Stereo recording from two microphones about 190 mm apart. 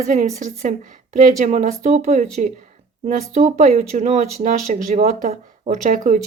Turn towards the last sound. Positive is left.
turn(degrees=-40)  # may be behind; listen again after turning